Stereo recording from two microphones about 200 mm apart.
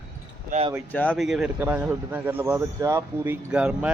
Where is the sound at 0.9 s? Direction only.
5° left (ahead or behind); by 3.3 s 15° right (ahead or behind).